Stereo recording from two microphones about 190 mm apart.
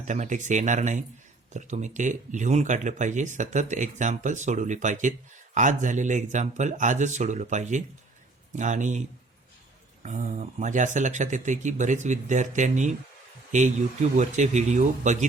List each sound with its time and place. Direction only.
0.0 s speech: 40° right (ahead or behind)